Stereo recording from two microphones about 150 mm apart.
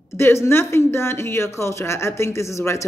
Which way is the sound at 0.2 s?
15° left (ahead or behind).